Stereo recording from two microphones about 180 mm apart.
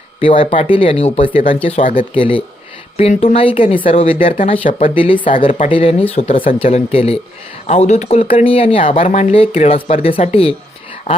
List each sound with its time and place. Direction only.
0.2 s speech: 30° left (ahead or behind)
1.8 s speech: 50° left (ahead or behind)
2.1 s speech: 30° left (ahead or behind)
5.5 s speech: 40° left (ahead or behind)
5.7 s speech: 30° left (ahead or behind)